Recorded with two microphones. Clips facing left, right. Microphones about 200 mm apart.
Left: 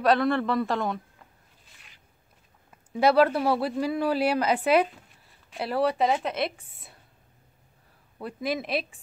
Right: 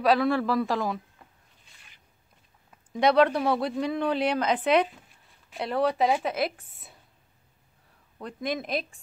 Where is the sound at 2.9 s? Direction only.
5° left (ahead or behind).